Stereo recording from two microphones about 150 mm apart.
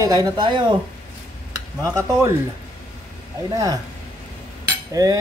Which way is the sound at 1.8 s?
20° right (ahead or behind).